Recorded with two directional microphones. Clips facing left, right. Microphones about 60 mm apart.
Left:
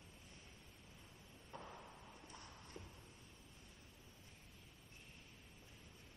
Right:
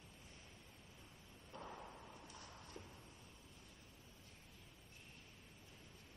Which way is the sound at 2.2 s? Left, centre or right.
Left.